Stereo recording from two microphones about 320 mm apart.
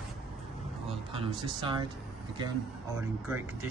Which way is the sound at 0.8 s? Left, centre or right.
Centre.